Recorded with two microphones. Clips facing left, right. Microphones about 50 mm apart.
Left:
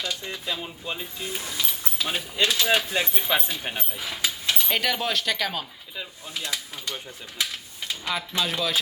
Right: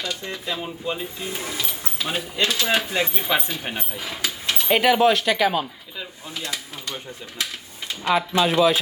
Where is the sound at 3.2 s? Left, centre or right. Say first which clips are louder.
Right 2 dB; centre.